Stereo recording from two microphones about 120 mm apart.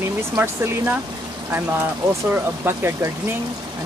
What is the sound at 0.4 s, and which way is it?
Speech, 15° right (ahead or behind).